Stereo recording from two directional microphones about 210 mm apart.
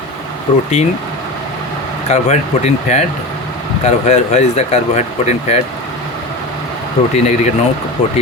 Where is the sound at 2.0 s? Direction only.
30° left (ahead or behind).